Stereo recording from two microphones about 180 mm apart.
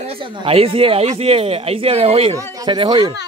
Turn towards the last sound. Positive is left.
turn(degrees=-25)  # may be behind; listen again after turning